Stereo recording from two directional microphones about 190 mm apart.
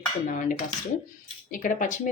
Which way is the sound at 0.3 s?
45° left (ahead or behind).